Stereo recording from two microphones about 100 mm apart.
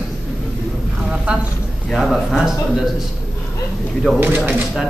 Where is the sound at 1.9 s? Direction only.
Centre (ahead or behind).